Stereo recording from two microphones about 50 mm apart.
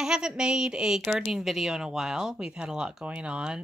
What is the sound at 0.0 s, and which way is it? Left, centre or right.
Speech, centre.